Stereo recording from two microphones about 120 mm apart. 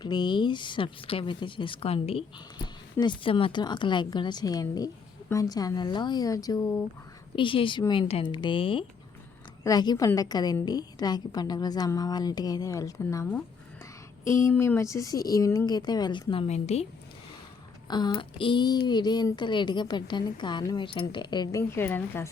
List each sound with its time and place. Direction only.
0.0 s speech: 40° left (ahead or behind); by 2.2 s 55° left (ahead or behind)
3.0 s speech: 40° left (ahead or behind)
7.3 s speech: 45° left (ahead or behind)
9.6 s speech: 35° left (ahead or behind)
14.3 s speech: 20° left (ahead or behind); by 16.5 s 45° left (ahead or behind)
16.5 s speech: 70° left (ahead or behind)
17.8 s speech: 40° left (ahead or behind)
21.7 s a woman's voice: 20° left (ahead or behind)